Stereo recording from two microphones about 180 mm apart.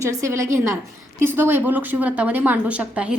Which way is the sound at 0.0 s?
15° right (ahead or behind).